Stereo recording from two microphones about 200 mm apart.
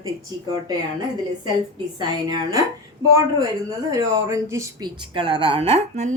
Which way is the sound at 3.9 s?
15° right (ahead or behind).